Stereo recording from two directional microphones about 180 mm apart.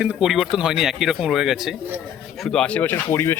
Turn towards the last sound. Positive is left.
turn(degrees=15)  # may be behind; listen again after turning